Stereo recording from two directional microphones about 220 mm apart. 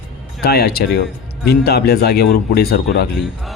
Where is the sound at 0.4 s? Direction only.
45° left (ahead or behind).